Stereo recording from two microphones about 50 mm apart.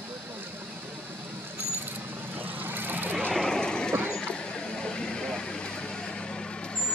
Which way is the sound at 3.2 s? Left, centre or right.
Centre.